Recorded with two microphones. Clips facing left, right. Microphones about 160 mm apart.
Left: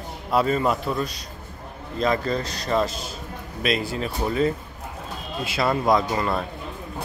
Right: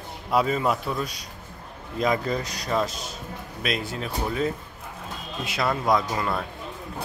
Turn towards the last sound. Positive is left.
turn(degrees=5)  # may be behind; listen again after turning